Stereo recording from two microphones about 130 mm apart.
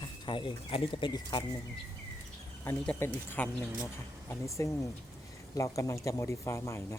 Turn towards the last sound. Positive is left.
turn(degrees=20)  # may be behind; listen again after turning